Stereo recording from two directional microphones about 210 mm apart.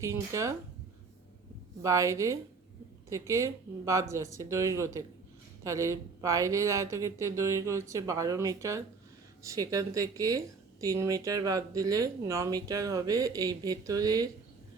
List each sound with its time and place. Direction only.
0.0 s speech: 15° right (ahead or behind)
1.8 s speech: 15° right (ahead or behind)